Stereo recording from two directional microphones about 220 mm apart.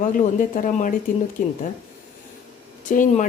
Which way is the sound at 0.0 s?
35° left (ahead or behind).